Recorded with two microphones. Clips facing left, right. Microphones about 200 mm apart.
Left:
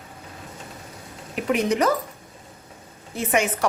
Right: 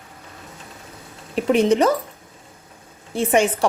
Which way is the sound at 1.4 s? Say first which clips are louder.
Right 5 dB; 30° right (ahead or behind).